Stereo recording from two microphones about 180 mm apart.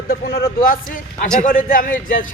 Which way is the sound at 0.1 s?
55° left (ahead or behind).